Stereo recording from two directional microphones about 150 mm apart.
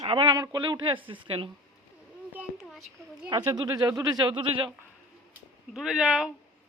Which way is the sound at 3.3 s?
30° right (ahead or behind).